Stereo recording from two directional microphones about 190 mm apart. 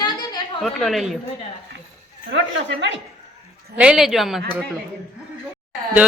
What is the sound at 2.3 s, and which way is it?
Speech, 70° right (ahead or behind).